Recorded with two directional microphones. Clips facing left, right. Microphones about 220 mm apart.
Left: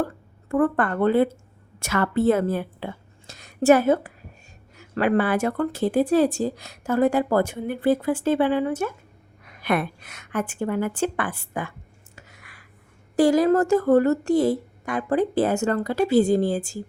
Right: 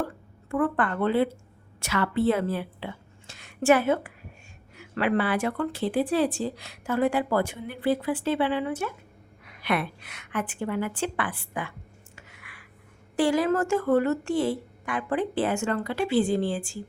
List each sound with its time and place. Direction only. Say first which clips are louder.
0.0 s a woman's voice: left 4 dB; 45° left (ahead or behind)
12.1 s a sound: left 3 dB; 40° left (ahead or behind)
13.1 s a woman's voice: left 5 dB; 40° left (ahead or behind)